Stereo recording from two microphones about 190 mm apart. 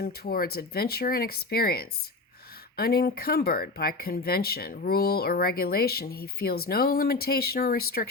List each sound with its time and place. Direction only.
0.0 s speech: 50° left (ahead or behind)